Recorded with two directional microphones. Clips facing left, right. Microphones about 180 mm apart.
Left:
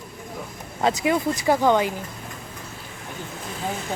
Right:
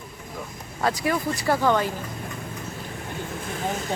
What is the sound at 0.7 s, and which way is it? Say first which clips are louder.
Speech: left 3 dB; 20° left (ahead or behind).